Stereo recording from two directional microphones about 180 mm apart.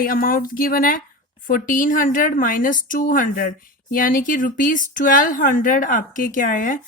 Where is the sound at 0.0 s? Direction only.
50° left (ahead or behind).